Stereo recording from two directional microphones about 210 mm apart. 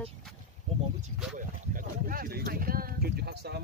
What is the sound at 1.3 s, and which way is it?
Speech, 40° right (ahead or behind).